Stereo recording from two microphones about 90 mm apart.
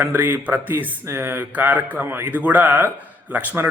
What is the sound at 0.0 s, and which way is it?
A man's voice, 25° right (ahead or behind).